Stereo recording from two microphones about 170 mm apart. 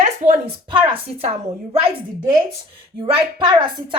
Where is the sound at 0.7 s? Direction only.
30° right (ahead or behind).